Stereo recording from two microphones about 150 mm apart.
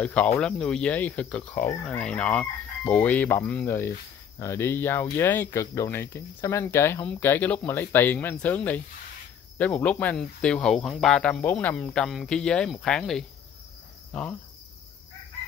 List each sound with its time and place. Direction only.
0.0 s speech: 10° left (ahead or behind)
1.5 s speech: 55° left (ahead or behind)
1.8 s speech: 5° left (ahead or behind)